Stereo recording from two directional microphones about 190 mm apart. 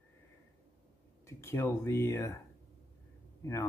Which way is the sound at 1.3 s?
15° left (ahead or behind).